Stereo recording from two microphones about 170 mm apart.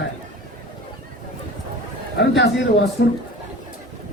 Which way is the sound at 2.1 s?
80° left.